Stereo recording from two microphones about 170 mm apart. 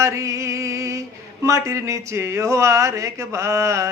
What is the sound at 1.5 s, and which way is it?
Speech, 15° right (ahead or behind).